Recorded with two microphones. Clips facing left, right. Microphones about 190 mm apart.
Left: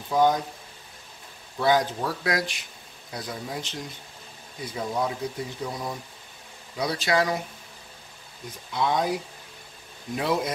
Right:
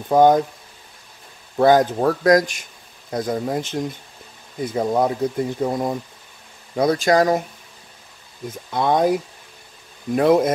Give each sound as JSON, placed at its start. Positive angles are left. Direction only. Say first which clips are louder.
{"t": 0.1, "sound": "speech", "louder": "right 8 dB", "side_deg": -50}
{"t": 1.6, "sound": "speech", "louder": "right 8 dB", "side_deg": -50}
{"t": 8.5, "sound": "speech", "louder": "right 6 dB", "side_deg": -50}
{"t": 10.1, "sound": "speech", "louder": "right 11 dB", "side_deg": -55}